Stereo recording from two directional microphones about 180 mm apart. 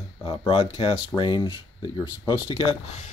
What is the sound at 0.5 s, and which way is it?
Speech, 30° left (ahead or behind).